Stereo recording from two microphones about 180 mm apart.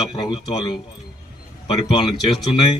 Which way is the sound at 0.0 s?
25° left (ahead or behind).